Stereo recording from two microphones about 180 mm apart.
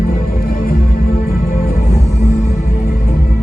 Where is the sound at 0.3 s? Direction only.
55° left (ahead or behind).